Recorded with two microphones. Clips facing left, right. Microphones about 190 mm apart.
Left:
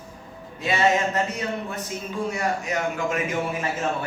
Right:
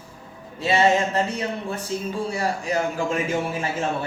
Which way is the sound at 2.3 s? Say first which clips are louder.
Left 1 dB; 30° right (ahead or behind).